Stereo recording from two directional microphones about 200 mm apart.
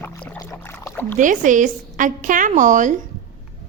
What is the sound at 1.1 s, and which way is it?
A woman's voice, 40° right (ahead or behind).